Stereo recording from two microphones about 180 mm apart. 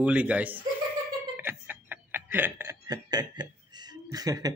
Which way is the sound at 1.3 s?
10° right (ahead or behind).